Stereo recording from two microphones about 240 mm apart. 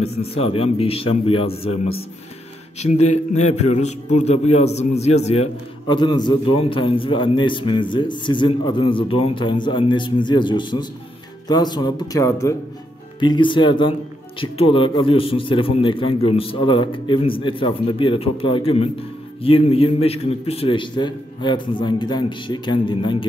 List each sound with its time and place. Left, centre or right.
0.0 s a man's voice: left